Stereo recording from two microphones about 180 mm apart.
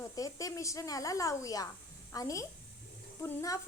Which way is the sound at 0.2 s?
20° left (ahead or behind).